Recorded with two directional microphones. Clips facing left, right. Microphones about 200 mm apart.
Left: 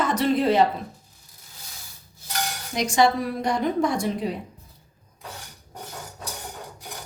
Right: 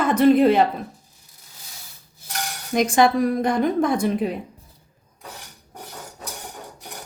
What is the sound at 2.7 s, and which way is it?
A woman's voice, 55° right (ahead or behind).